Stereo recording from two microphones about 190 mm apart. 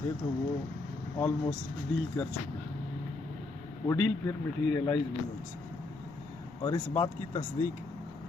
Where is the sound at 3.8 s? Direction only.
20° left (ahead or behind).